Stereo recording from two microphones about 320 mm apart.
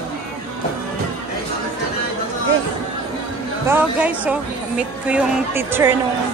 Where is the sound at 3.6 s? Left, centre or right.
Centre.